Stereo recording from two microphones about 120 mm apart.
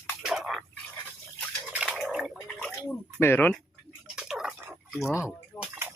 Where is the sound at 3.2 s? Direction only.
20° left (ahead or behind).